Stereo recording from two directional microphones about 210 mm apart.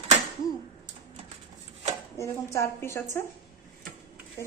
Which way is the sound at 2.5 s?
15° left (ahead or behind).